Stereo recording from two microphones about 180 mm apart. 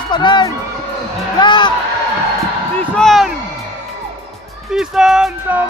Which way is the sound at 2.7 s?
5° left (ahead or behind).